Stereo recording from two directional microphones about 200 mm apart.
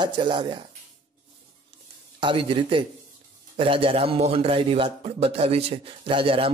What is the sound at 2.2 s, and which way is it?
A man's voice, 25° right (ahead or behind).